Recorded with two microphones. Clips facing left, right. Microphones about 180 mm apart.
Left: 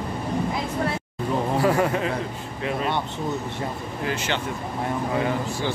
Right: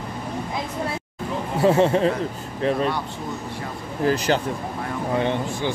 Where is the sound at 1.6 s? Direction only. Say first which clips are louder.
Right 8 dB; 25° right (ahead or behind).